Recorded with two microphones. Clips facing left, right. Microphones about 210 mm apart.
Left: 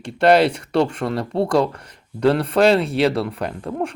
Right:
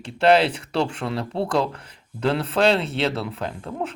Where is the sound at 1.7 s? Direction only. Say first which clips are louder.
Left 1 dB; 5° right (ahead or behind).